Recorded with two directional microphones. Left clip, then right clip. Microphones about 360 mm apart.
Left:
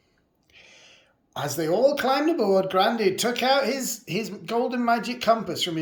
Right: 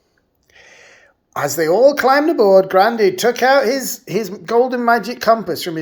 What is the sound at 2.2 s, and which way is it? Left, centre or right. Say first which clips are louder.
Speech: right 10 dB; right.